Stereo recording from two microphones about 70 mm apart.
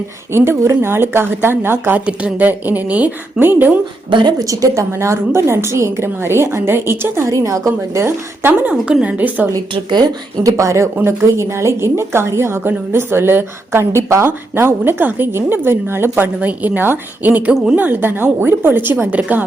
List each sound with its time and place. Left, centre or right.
0.3 s a woman's voice: right
2.0 s a woman's voice: centre
4.2 s a woman's voice: right
4.4 s a woman's voice: right
7.3 s a woman's voice: right
8.0 s a woman's voice: right
8.7 s a woman's voice: centre
10.4 s a woman's voice: right
10.9 s a woman's voice: right